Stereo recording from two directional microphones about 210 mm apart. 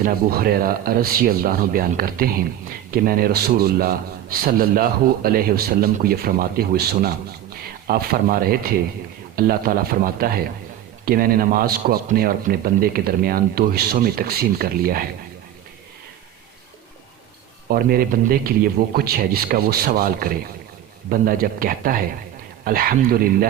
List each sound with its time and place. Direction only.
0.0 s a man's voice: 45° right (ahead or behind)
17.7 s a man's voice: 45° right (ahead or behind)